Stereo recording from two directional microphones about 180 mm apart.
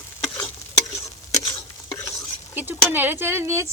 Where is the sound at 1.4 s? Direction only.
20° left (ahead or behind).